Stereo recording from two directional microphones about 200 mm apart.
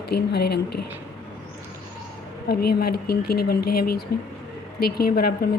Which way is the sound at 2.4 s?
50° left (ahead or behind).